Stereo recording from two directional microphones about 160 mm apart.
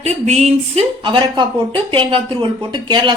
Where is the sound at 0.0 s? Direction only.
45° right (ahead or behind).